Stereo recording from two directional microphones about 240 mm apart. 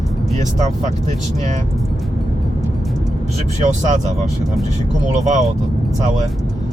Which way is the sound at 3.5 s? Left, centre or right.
Right.